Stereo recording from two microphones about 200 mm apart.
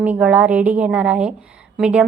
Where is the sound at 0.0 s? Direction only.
5° right (ahead or behind).